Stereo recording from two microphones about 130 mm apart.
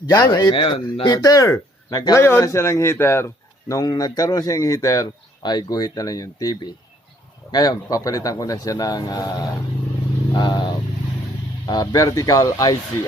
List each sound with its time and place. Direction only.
0.1 s speech: 30° left (ahead or behind)
0.5 s speech: 40° left (ahead or behind); by 12.7 s 25° left (ahead or behind)